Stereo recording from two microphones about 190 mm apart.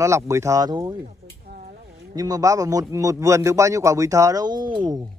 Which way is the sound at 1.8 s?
60° right (ahead or behind).